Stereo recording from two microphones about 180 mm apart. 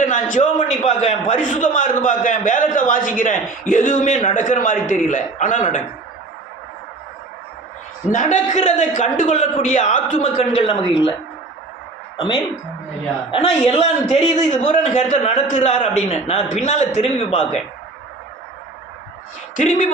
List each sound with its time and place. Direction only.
0.0 s a man's voice: 45° left (ahead or behind)
8.1 s a man's voice: 40° left (ahead or behind)
13.3 s a man's voice: 35° left (ahead or behind)
19.5 s a man's voice: 45° left (ahead or behind)